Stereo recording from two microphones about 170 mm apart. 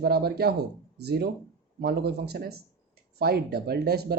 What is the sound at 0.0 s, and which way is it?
Speech, 70° right (ahead or behind).